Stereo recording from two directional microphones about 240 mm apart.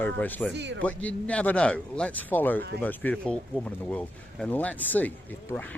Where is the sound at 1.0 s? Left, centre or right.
Centre.